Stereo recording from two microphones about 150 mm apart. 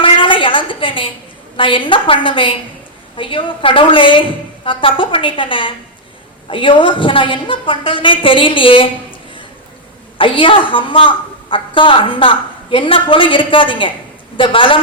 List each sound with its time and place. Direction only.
0.0 s a sound: 35° left (ahead or behind)
1.5 s a woman's voice: 35° left (ahead or behind)
10.2 s a woman's voice: 35° left (ahead or behind)